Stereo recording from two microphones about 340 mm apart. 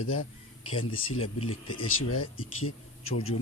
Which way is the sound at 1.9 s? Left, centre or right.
Left.